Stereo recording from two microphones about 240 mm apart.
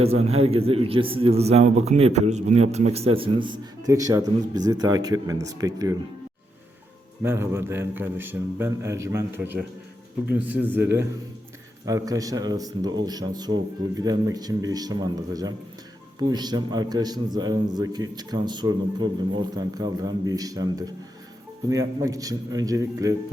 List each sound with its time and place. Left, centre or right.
0.0 s a man's voice: right
7.2 s a man's voice: centre